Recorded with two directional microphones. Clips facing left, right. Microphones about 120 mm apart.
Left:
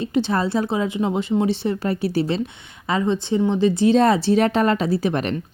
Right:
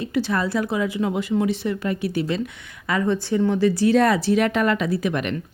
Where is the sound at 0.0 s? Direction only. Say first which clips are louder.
Left 2 dB; 25° left (ahead or behind).